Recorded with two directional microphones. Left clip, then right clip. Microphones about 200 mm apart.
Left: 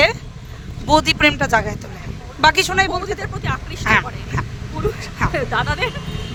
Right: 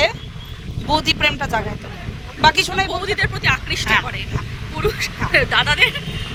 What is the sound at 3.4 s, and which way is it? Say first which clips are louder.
Speech: right 7 dB; centre (ahead or behind).